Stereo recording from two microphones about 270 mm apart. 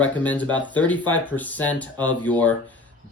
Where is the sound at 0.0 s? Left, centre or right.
Centre.